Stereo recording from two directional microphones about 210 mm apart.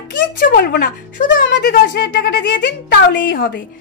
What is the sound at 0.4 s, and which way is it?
Speech, 45° left (ahead or behind).